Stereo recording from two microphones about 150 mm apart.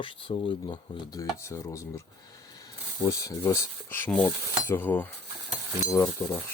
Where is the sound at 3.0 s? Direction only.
20° left (ahead or behind).